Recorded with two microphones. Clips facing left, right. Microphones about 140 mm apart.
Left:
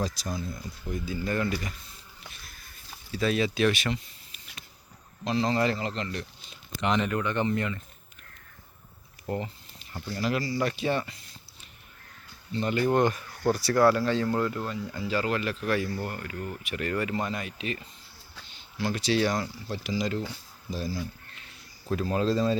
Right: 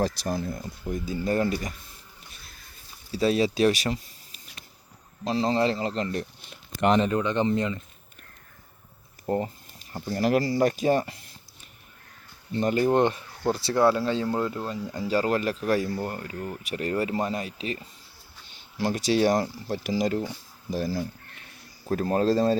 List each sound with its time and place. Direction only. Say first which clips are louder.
0.4 s speech: right 4 dB; 50° right (ahead or behind)
3.1 s speech: right 4 dB; 35° right (ahead or behind)
7.1 s speech: right 3 dB; 20° right (ahead or behind)
9.2 s a sound: right 5 dB; 35° right (ahead or behind)
10.2 s speech: right 6 dB; 45° right (ahead or behind)
12.5 s speech: right 3 dB; 40° right (ahead or behind); by 14.7 s 20° right (ahead or behind)
14.9 s speech: right 4 dB; 40° right (ahead or behind)
21.8 s speech: right 3 dB; 45° right (ahead or behind)